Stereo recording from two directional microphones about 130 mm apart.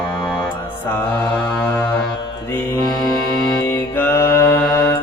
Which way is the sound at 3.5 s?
15° left (ahead or behind).